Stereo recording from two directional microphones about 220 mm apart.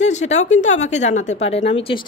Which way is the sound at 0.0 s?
30° left (ahead or behind).